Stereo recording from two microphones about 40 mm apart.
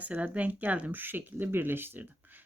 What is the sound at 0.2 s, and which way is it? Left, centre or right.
Speech, right.